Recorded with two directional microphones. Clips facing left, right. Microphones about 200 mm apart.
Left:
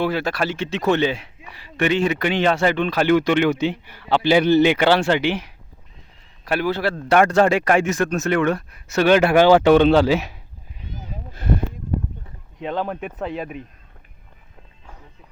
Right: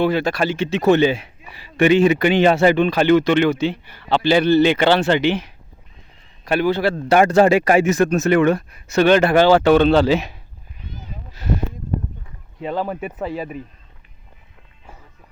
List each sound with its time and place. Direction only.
0.0 s a man's voice: 5° left (ahead or behind)
3.0 s a man's voice: 10° left (ahead or behind)
10.9 s wild animals: 50° left (ahead or behind)
12.5 s a man's voice: 5° right (ahead or behind)